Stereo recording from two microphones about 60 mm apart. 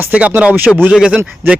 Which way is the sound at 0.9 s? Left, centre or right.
Centre.